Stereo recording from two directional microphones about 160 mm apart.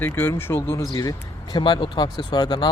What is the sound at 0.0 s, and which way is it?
Speech, 15° left (ahead or behind).